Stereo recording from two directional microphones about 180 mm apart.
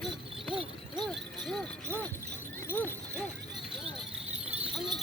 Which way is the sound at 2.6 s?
10° left (ahead or behind).